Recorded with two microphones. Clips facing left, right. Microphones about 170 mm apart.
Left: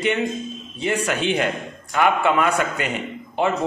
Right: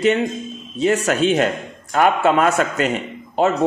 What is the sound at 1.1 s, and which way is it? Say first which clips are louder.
A man's voice: right 5 dB; 40° right (ahead or behind).